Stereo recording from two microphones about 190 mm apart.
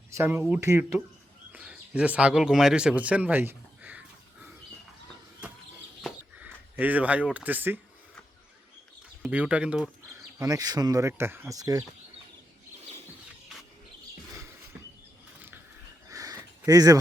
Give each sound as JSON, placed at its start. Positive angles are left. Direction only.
{"t": 0.1, "sound": "speech", "side_deg": -10}
{"t": 1.5, "sound": "bird", "side_deg": -5}
{"t": 6.0, "sound": "a sound", "side_deg": -5}
{"t": 9.2, "sound": "speech", "side_deg": -5}
{"t": 10.4, "sound": "speech", "side_deg": -20}
{"t": 16.0, "sound": "a sound", "side_deg": -20}